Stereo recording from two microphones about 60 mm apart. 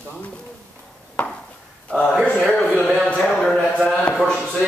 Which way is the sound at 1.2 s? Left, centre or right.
Centre.